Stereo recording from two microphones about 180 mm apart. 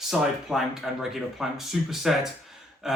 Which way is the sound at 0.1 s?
5° right (ahead or behind).